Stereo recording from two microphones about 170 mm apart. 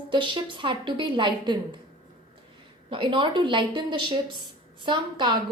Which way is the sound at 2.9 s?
30° right (ahead or behind).